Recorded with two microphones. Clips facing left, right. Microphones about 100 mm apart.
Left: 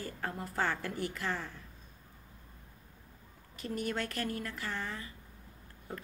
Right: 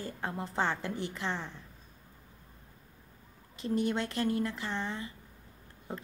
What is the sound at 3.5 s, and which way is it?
A woman's voice, 25° right (ahead or behind).